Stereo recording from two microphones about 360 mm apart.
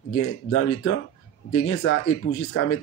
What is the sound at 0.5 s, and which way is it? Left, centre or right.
Speech, left.